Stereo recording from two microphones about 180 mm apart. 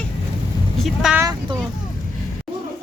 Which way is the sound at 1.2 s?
20° right (ahead or behind).